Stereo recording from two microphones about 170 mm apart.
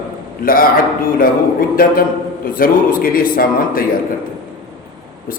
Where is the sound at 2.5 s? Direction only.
55° left (ahead or behind).